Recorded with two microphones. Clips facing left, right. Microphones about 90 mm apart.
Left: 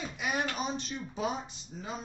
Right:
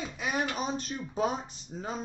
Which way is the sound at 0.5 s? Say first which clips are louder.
Right 2 dB; 40° right (ahead or behind).